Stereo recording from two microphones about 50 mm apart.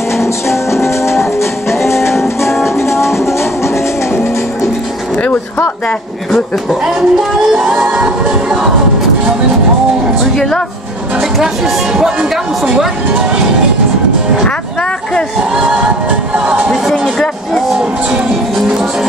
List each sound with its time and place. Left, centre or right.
0.2 s music: left
6.3 s speech: centre
7.5 s speech: centre
10.3 s speech: centre
11.1 s speech: centre
15.5 s music: right
16.4 s speech: right